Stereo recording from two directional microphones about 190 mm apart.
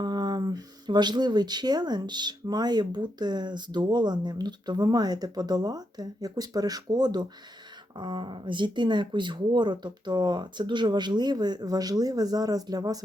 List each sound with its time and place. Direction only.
0.0 s speech: 20° right (ahead or behind)